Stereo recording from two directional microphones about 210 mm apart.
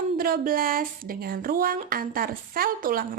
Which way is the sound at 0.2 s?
45° right (ahead or behind).